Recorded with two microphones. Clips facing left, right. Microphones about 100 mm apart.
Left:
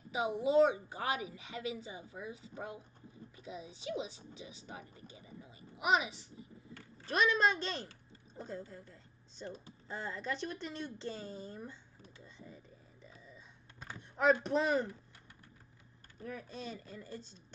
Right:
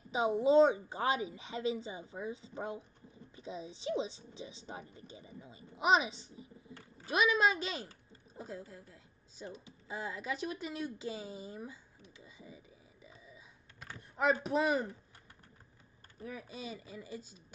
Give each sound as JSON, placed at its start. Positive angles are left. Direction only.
{"t": 0.1, "sound": "a woman's voice", "side_deg": -25}
{"t": 7.1, "sound": "a woman's voice", "side_deg": -10}
{"t": 12.2, "sound": "a sound", "side_deg": -5}
{"t": 13.9, "sound": "speech", "side_deg": 0}
{"t": 16.2, "sound": "speech", "side_deg": -5}